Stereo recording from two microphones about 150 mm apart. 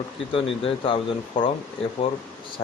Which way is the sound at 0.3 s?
35° left (ahead or behind).